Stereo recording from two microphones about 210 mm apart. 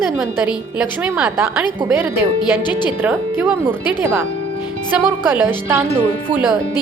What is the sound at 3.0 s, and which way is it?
Speech, 10° right (ahead or behind).